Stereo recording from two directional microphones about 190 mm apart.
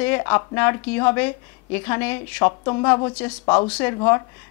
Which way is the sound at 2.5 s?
25° left (ahead or behind).